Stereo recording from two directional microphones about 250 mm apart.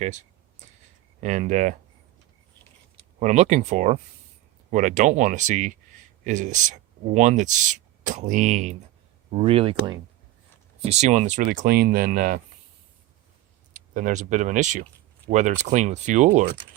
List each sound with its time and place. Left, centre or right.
0.0 s speech: right
3.2 s speech: right
13.7 s speech: right